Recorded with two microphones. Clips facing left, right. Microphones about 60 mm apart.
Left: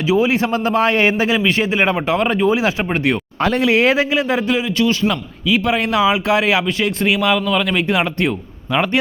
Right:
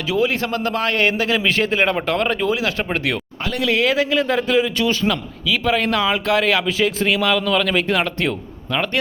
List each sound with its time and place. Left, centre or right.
0.1 s a man's voice: centre
1.4 s a man's voice: centre
3.6 s a man's voice: left
4.1 s a man's voice: centre
6.7 s a man's voice: centre